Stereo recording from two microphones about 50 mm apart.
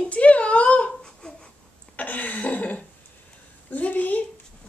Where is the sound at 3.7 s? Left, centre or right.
Left.